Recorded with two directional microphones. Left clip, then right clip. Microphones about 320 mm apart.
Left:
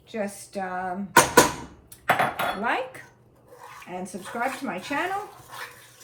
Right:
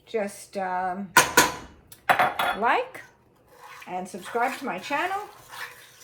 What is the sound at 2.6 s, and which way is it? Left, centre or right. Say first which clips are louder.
Speech: right 3 dB; centre.